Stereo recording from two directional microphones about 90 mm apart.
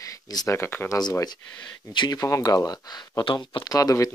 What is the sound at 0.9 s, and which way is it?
Speech, 45° left (ahead or behind).